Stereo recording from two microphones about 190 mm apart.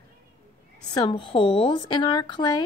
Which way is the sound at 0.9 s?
25° left (ahead or behind).